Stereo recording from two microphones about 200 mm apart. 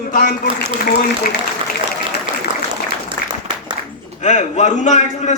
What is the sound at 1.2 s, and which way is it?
Speech, 45° left (ahead or behind).